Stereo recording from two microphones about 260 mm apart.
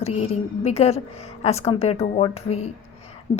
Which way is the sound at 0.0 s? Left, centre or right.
Left.